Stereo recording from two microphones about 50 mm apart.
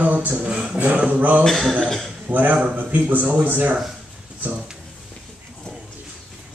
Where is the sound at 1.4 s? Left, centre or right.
Centre.